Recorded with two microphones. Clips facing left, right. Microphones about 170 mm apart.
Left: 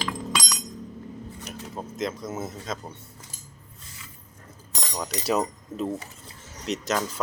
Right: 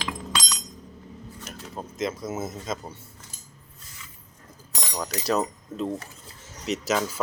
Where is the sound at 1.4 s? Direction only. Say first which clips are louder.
Even; centre (ahead or behind).